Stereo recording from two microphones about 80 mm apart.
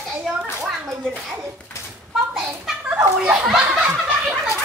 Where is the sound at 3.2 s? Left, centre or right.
Centre.